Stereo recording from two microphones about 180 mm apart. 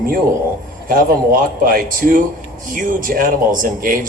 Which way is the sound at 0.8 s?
50° right (ahead or behind).